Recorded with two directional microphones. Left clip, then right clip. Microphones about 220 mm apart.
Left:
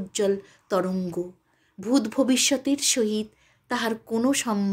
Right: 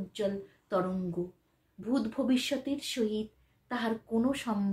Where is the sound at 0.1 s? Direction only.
45° left (ahead or behind).